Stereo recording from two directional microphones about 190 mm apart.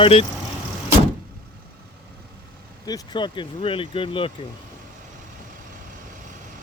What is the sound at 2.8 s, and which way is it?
Speech, 20° left (ahead or behind).